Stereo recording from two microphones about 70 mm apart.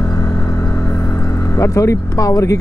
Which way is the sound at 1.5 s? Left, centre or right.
Left.